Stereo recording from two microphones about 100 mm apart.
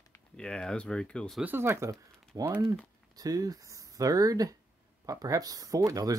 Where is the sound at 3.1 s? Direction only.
40° right (ahead or behind).